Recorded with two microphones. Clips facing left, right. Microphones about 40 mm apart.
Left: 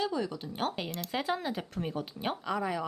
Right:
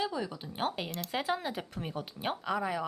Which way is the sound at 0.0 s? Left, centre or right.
Centre.